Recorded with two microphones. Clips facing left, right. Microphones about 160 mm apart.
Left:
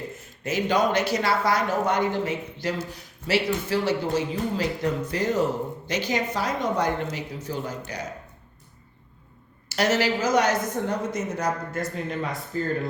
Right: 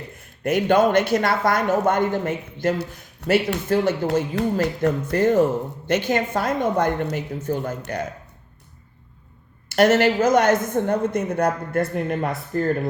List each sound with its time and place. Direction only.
0.4 s speech: 55° right (ahead or behind)
3.5 s speech: 65° right (ahead or behind)
9.6 s a woman's voice: 55° right (ahead or behind)